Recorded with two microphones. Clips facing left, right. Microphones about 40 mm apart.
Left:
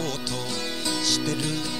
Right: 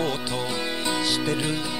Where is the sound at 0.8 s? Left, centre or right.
Right.